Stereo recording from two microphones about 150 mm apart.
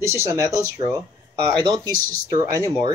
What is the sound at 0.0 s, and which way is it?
Speech, 20° right (ahead or behind).